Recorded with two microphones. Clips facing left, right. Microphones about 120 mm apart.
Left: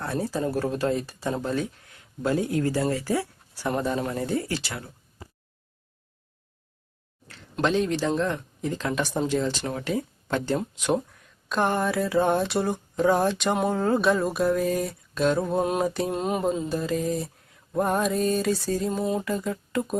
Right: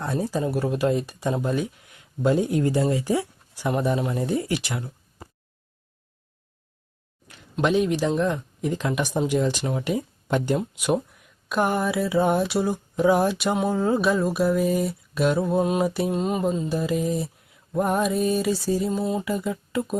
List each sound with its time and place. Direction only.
0.0 s speech: 15° right (ahead or behind)
7.6 s speech: 15° right (ahead or behind)